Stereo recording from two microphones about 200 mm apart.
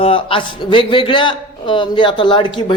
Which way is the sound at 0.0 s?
25° left (ahead or behind).